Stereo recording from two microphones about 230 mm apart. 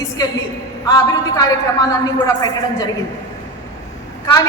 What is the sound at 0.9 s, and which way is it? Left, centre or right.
A woman's voice, centre.